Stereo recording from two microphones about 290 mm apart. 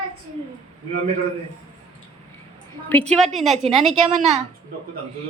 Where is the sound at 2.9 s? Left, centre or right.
Centre.